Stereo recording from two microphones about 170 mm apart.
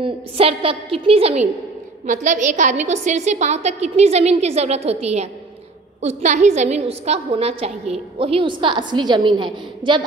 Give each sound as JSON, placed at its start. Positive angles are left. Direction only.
{"t": 0.0, "sound": "a woman's voice", "side_deg": -35}